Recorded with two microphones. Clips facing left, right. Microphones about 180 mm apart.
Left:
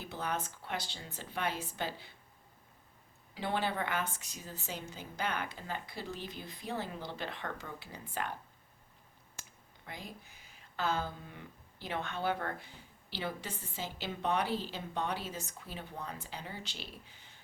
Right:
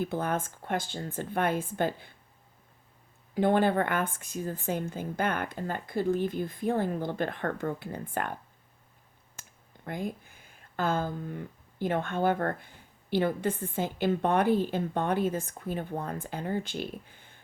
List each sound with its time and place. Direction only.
0.0 s speech: 50° right (ahead or behind)
3.3 s speech: 50° right (ahead or behind)
9.4 s speech: 50° right (ahead or behind)